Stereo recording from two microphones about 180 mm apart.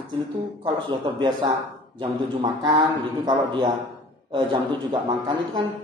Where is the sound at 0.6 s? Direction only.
25° right (ahead or behind).